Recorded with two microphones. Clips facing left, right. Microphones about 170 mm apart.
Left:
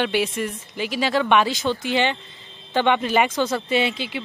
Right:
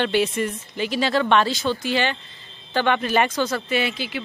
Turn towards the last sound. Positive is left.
turn(degrees=25)  # may be behind; listen again after turning